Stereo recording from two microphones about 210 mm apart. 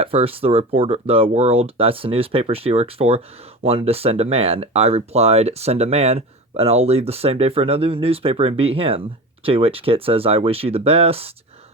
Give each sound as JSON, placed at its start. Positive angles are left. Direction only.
{"t": 0.0, "sound": "speech", "side_deg": -25}